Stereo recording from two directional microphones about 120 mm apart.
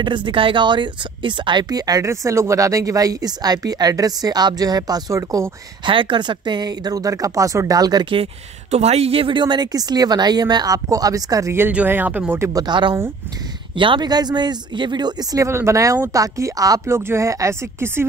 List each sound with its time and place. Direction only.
0.0 s speech: 40° right (ahead or behind)
5.9 s speech: 45° right (ahead or behind)
8.1 s speech: 55° right (ahead or behind); by 12.4 s 15° right (ahead or behind)
12.5 s speech: 40° right (ahead or behind); by 18.0 s 20° right (ahead or behind)